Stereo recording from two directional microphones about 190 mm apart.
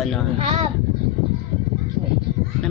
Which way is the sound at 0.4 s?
30° right (ahead or behind).